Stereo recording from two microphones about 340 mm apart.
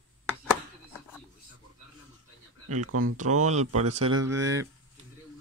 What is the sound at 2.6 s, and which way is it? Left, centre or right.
Speech, right.